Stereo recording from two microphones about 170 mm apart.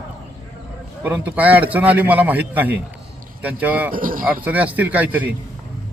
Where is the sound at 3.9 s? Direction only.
55° right (ahead or behind).